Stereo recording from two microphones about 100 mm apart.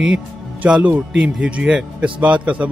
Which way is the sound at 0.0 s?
5° right (ahead or behind).